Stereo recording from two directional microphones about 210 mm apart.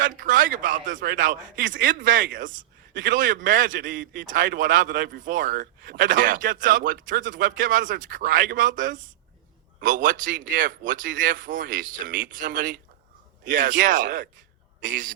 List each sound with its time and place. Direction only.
0.0 s speech: 40° right (ahead or behind)